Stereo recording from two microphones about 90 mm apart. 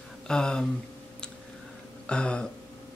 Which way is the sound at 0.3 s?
10° left (ahead or behind).